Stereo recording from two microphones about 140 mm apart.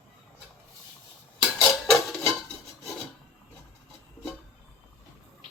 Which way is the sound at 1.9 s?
Centre (ahead or behind).